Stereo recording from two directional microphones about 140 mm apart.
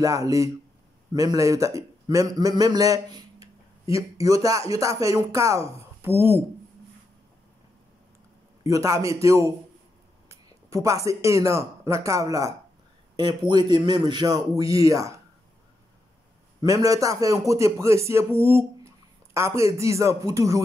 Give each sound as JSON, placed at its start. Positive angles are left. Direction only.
{"t": 0.0, "sound": "a man's voice", "side_deg": -25}
{"t": 8.6, "sound": "a man's voice", "side_deg": -25}
{"t": 16.6, "sound": "speech", "side_deg": -25}